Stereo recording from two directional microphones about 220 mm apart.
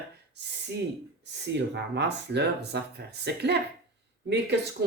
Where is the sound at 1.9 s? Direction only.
50° right (ahead or behind).